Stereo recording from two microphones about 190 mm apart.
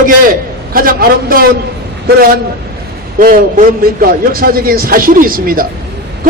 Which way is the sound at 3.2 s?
45° right (ahead or behind).